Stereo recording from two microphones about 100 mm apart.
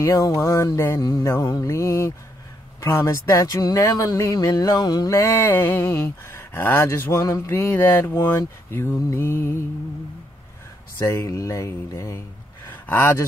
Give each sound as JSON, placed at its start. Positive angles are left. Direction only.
{"t": 0.0, "sound": "speech", "side_deg": 35}
{"t": 7.5, "sound": "speech", "side_deg": 20}
{"t": 11.0, "sound": "speech", "side_deg": 25}
{"t": 12.6, "sound": "a sound", "side_deg": 20}